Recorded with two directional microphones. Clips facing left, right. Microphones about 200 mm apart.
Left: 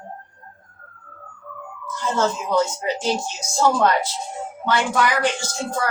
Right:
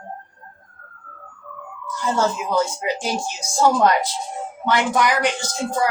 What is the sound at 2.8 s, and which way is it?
A woman's voice, 10° right (ahead or behind).